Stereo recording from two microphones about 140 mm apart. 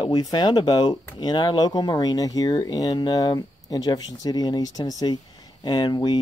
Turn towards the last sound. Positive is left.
turn(degrees=30)  # may be behind; listen again after turning